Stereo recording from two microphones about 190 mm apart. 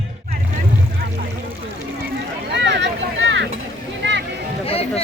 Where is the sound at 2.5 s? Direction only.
65° right (ahead or behind).